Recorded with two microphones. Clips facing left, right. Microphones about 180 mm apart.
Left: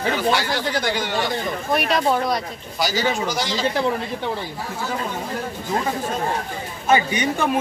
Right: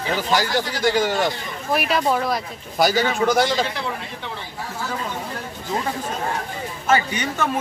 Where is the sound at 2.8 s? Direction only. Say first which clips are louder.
Right 3 dB; 55° right (ahead or behind).